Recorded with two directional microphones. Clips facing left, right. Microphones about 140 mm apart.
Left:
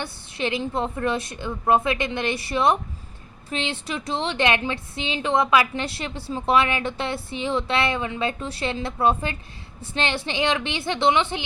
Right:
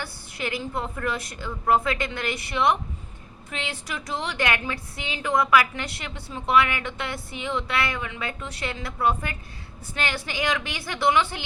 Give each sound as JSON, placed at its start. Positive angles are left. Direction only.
{"t": 0.0, "sound": "a woman's voice", "side_deg": 25}